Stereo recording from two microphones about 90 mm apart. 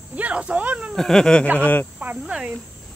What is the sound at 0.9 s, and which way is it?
Speech, 5° left (ahead or behind).